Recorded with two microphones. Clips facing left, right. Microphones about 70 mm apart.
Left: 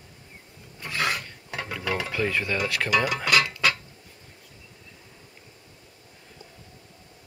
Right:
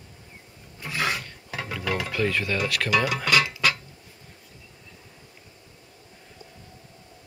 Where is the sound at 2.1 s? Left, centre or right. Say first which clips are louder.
Right 1 dB; centre.